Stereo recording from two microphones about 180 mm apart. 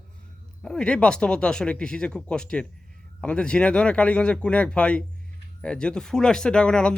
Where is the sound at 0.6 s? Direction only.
5° left (ahead or behind).